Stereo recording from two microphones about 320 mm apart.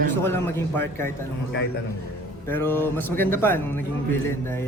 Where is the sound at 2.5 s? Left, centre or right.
Centre.